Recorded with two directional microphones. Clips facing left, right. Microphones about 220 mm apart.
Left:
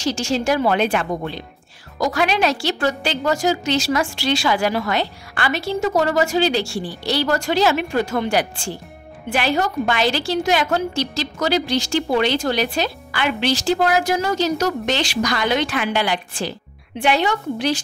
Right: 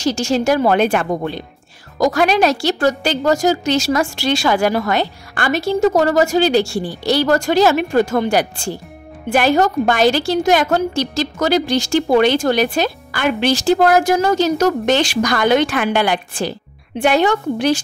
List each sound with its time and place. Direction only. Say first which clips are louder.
0.0 s a woman's voice: right 4 dB; 45° right (ahead or behind)